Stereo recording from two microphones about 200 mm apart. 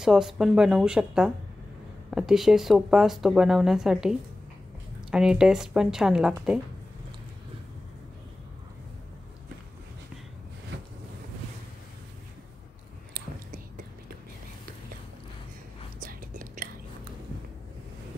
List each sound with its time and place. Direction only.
0.0 s speech: centre (ahead or behind)
13.1 s whispering: 45° right (ahead or behind)
16.0 s whispering: 45° right (ahead or behind)